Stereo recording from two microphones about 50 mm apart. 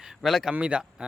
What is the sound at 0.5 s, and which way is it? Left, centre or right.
Speech, right.